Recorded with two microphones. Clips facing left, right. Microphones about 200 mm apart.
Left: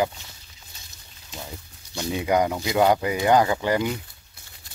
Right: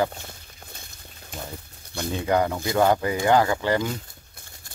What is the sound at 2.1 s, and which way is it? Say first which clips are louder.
Speech: left 1 dB; 15° left (ahead or behind).